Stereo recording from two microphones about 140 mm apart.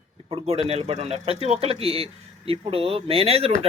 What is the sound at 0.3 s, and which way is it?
Speech, 45° right (ahead or behind).